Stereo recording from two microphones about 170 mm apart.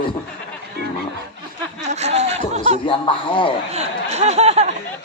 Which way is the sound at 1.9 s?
40° right (ahead or behind).